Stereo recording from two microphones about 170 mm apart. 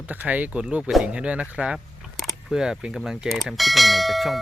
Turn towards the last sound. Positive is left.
turn(degrees=0)  # may be behind; listen again after turning